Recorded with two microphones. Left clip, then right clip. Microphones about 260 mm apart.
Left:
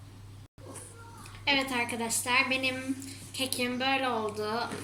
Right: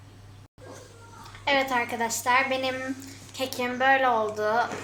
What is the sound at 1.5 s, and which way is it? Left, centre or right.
A woman's voice, centre.